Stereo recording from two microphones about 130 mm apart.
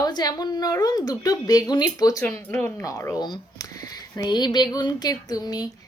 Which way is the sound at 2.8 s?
25° left (ahead or behind).